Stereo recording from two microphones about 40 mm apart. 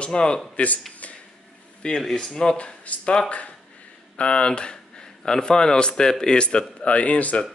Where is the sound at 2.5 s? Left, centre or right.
Left.